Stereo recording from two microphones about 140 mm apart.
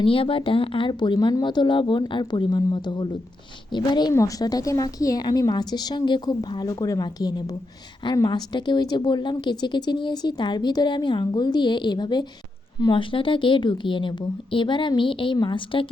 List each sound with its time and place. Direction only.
0.0 s a woman's voice: 40° left (ahead or behind)